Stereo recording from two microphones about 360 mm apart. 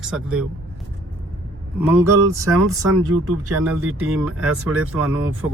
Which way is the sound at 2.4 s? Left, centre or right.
Right.